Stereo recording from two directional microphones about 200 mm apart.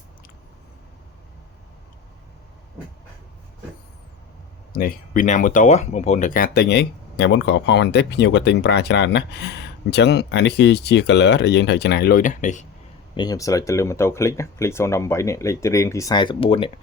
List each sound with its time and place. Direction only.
4.8 s speech: 45° left (ahead or behind)
13.1 s speech: 20° left (ahead or behind)